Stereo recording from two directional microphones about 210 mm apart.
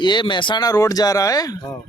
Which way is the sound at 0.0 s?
20° left (ahead or behind).